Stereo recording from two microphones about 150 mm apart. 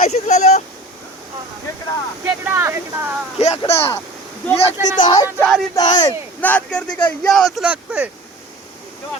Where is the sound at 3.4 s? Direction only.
45° left (ahead or behind).